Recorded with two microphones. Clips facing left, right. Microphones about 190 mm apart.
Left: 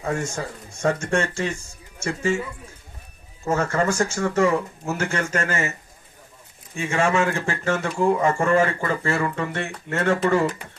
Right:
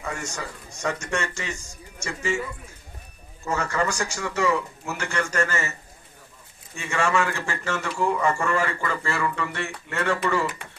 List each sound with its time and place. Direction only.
0.1 s speech: 50° left (ahead or behind)
3.5 s speech: 50° left (ahead or behind)
6.8 s speech: 50° left (ahead or behind)